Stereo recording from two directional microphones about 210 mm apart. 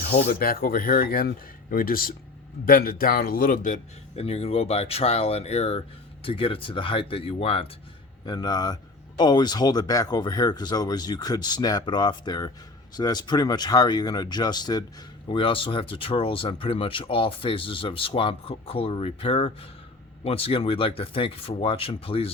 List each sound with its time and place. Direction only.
0.1 s speech: 45° left (ahead or behind); by 22.3 s 25° left (ahead or behind)